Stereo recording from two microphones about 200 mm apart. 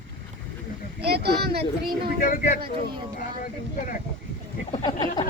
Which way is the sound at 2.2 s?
45° left (ahead or behind).